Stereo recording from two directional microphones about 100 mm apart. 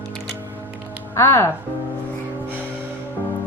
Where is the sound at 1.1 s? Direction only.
25° left (ahead or behind).